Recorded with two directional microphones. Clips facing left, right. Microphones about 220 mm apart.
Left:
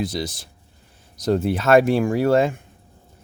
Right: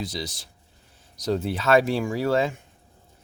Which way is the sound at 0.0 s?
50° left (ahead or behind).